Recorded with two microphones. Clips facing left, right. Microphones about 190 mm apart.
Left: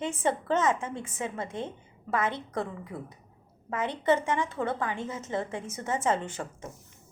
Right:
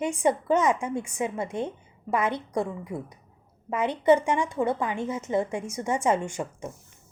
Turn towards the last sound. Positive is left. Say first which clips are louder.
# right 4 dB
turn(degrees=-15)  # may be behind; listen again after turning